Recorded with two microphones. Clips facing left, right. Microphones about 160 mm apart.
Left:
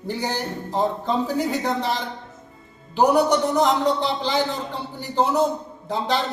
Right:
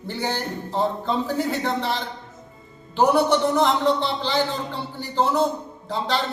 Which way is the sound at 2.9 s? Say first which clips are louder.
Left 1 dB; 15° left (ahead or behind).